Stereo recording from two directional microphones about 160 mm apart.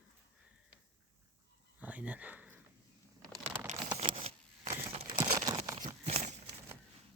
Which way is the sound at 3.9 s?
40° right (ahead or behind).